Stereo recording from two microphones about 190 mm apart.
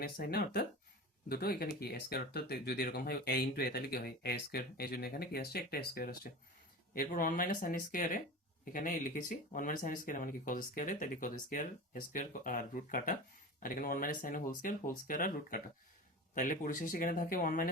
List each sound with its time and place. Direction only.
0.2 s speech: 55° left (ahead or behind)